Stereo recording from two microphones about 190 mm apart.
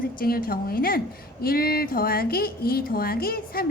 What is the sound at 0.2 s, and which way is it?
Speech, 50° left (ahead or behind).